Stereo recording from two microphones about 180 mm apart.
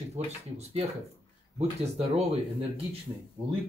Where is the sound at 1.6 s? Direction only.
35° right (ahead or behind).